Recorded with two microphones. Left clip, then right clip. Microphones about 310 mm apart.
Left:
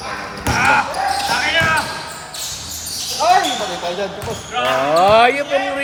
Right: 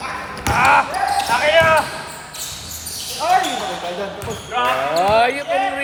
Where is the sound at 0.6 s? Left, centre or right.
Centre.